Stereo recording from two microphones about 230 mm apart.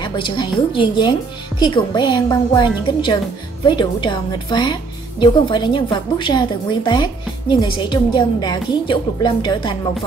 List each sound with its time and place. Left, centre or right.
0.0 s a woman's voice: left